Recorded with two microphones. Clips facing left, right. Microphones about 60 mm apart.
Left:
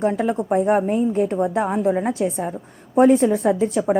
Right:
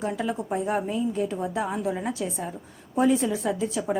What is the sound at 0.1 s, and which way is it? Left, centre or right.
A woman's voice, left.